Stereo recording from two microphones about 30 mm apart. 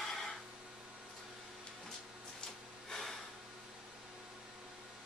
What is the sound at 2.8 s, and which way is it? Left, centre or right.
Snort, centre.